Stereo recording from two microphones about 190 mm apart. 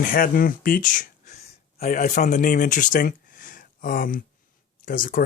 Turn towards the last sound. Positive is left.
turn(degrees=45)  # may be behind; listen again after turning